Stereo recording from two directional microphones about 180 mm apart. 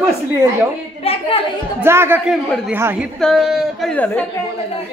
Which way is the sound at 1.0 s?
30° left (ahead or behind).